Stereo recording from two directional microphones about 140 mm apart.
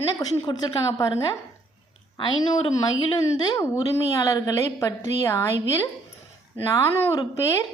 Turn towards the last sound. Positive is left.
turn(degrees=20)  # may be behind; listen again after turning